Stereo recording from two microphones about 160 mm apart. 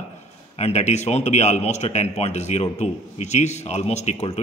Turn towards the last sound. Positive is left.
turn(degrees=45)  # may be behind; listen again after turning